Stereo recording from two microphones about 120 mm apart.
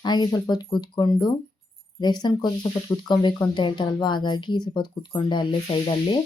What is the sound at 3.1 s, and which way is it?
A woman's voice, 40° left (ahead or behind).